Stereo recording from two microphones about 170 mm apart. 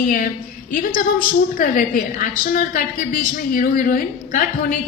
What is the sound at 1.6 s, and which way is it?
Speech, 55° left (ahead or behind).